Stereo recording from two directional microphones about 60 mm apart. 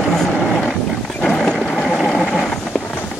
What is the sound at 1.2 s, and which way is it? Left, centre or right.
Dog, centre.